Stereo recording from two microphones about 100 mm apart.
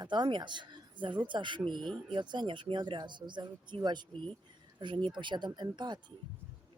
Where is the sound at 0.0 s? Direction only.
50° right (ahead or behind).